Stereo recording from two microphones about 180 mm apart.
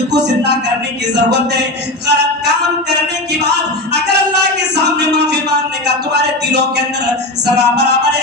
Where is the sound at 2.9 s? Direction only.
70° right (ahead or behind).